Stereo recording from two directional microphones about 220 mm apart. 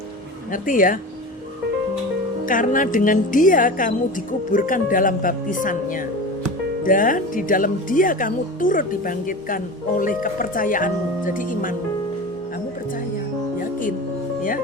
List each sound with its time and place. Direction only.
0.5 s a woman's voice: 40° left (ahead or behind)
2.5 s a woman's voice: 35° left (ahead or behind)